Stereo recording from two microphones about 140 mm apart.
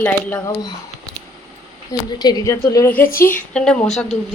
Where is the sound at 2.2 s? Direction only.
30° left (ahead or behind).